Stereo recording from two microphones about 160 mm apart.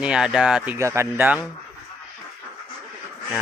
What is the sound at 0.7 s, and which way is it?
Speech, 15° right (ahead or behind).